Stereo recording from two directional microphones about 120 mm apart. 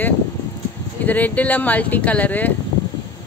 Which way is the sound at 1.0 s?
15° left (ahead or behind).